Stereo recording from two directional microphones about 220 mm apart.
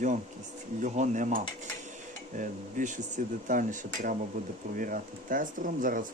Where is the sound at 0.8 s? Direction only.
35° right (ahead or behind).